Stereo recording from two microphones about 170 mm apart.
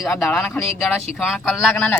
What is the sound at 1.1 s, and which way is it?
Speech, centre (ahead or behind).